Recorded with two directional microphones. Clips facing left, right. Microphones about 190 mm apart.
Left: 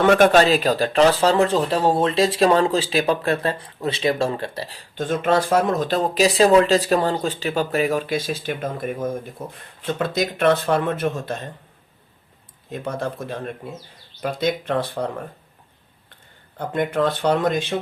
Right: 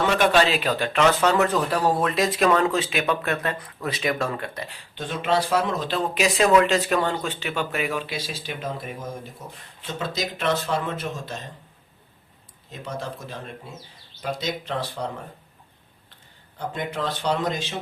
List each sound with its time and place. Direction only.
0.0 s speech: 50° left (ahead or behind)
12.7 s speech: 55° left (ahead or behind)
16.6 s speech: 55° left (ahead or behind)